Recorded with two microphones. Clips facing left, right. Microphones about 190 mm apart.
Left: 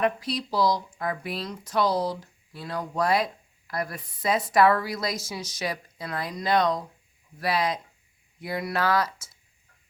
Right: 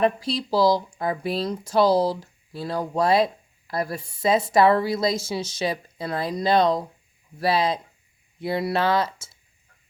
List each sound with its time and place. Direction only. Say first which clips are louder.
0.0 s speech: right 4 dB; 30° right (ahead or behind)